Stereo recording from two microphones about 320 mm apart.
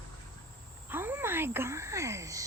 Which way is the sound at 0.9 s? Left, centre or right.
Centre.